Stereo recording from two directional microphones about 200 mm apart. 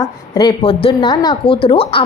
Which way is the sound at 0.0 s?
20° left (ahead or behind).